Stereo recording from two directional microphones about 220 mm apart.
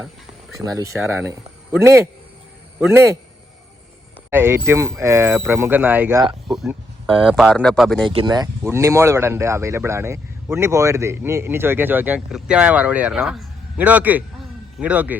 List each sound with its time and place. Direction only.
0.8 s speech: 10° right (ahead or behind)
4.3 s speech: 10° right (ahead or behind)
7.3 s speech: centre (ahead or behind)
8.1 s speech: 20° right (ahead or behind)